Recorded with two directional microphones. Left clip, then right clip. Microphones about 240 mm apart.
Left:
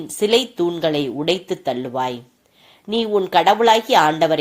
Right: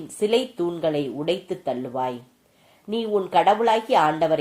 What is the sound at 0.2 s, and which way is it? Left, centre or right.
Speech, centre.